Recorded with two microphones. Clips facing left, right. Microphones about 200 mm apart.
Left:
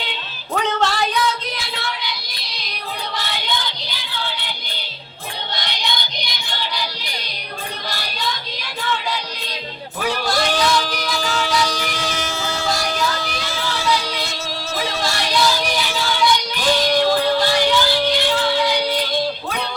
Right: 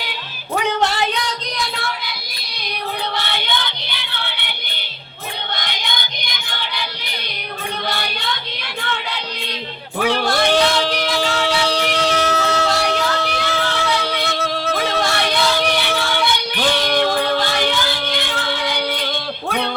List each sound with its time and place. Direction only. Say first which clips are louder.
0.6 s music: right 1 dB; 15° right (ahead or behind)
3.2 s a sound: right 2 dB; 65° right (ahead or behind)
5.5 s music: left 1 dB; 50° right (ahead or behind)
7.9 s child singing: even; 60° right (ahead or behind)
8.8 s music: left 2 dB; 60° right (ahead or behind)